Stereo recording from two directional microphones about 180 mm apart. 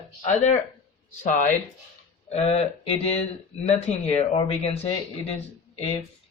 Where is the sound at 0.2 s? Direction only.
40° left (ahead or behind).